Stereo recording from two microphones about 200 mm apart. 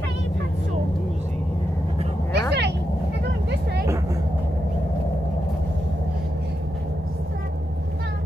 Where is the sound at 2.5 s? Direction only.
60° right (ahead or behind).